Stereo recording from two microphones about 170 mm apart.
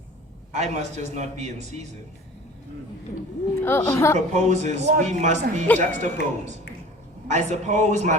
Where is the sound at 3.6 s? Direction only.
15° left (ahead or behind).